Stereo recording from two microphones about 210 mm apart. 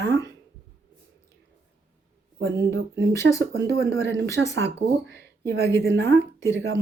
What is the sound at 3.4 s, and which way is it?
Speech, 55° right (ahead or behind).